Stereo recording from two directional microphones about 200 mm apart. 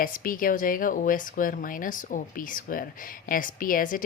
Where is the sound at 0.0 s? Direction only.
45° left (ahead or behind).